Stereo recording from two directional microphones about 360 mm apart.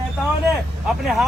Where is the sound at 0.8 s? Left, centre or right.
Centre.